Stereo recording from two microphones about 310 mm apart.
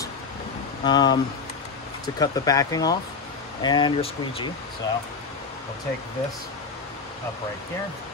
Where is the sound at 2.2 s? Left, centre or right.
Centre.